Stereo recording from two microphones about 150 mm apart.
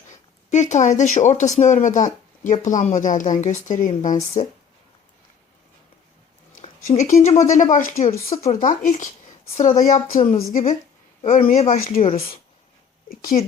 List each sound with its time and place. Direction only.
0.5 s speech: 55° left (ahead or behind)
6.6 s a sound: 55° left (ahead or behind)
7.4 s speech: 55° left (ahead or behind)
8.5 s speech: 55° left (ahead or behind)
10.2 s speech: 40° left (ahead or behind)